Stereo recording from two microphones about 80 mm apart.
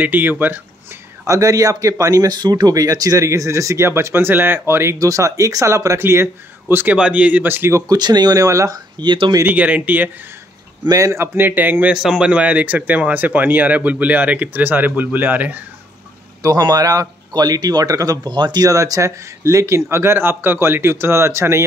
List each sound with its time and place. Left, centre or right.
0.0 s speech: right
1.2 s speech: right
4.9 s speech: right
7.0 s speech: centre
7.4 s speech: right
7.9 s speech: right
9.0 s speech: right
9.5 s speech: centre
10.9 s speech: right
11.3 s speech: right
11.9 s speech: centre
16.4 s speech: right
18.7 s speech: right